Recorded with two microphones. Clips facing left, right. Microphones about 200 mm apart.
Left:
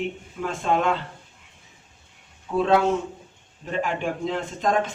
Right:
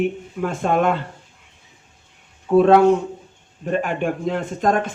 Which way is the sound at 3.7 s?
55° right (ahead or behind).